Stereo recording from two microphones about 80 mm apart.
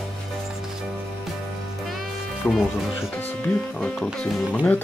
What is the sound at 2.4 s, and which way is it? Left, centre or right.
Speech, centre.